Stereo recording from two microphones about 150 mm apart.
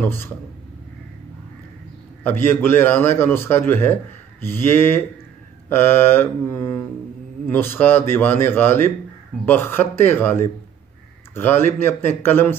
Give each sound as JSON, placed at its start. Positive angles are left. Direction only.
{"t": 0.0, "sound": "a man's voice", "side_deg": 15}
{"t": 2.2, "sound": "a man's voice", "side_deg": 15}